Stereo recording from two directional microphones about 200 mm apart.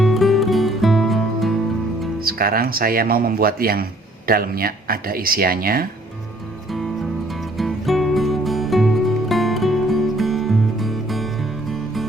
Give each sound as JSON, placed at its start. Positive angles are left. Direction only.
{"t": 0.0, "sound": "music", "side_deg": 0}
{"t": 2.2, "sound": "speech", "side_deg": -50}
{"t": 7.3, "sound": "music", "side_deg": 0}